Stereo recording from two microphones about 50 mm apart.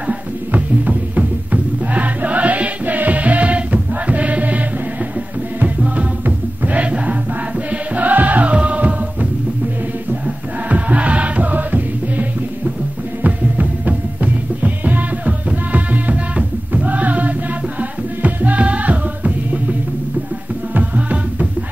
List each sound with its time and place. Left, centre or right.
0.0 s music: right
6.2 s music: right